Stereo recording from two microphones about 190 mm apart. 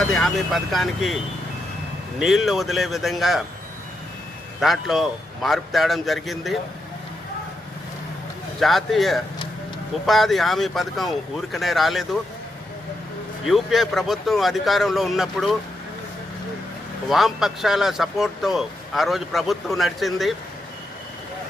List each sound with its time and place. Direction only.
0.1 s speech: centre (ahead or behind)
4.6 s speech: centre (ahead or behind)
8.5 s speech: centre (ahead or behind)
13.5 s speech: centre (ahead or behind)
17.1 s speech: centre (ahead or behind)